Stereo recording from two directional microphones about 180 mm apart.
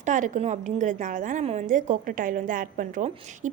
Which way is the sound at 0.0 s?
45° right (ahead or behind).